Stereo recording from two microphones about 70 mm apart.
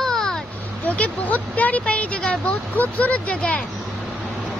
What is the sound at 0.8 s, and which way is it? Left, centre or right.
Speech, left.